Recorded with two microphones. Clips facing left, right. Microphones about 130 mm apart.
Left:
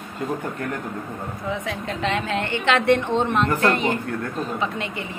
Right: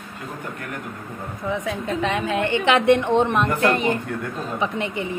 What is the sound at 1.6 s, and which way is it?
A woman's voice, 15° right (ahead or behind).